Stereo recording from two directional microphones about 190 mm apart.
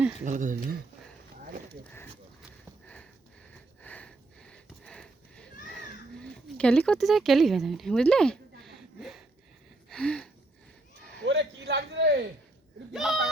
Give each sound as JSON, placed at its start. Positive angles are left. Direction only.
{"t": 0.3, "sound": "speech", "side_deg": -45}
{"t": 2.8, "sound": "sniff", "side_deg": 5}
{"t": 9.9, "sound": "a sound", "side_deg": 5}
{"t": 11.3, "sound": "a man's voice", "side_deg": -65}
{"t": 12.9, "sound": "speech", "side_deg": 0}